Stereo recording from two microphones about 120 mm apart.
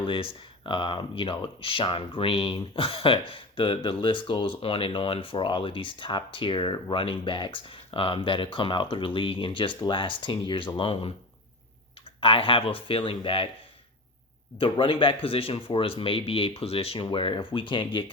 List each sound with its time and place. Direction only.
0.0 s speech: 45° left (ahead or behind)
12.2 s speech: 50° left (ahead or behind)
14.6 s speech: 45° left (ahead or behind)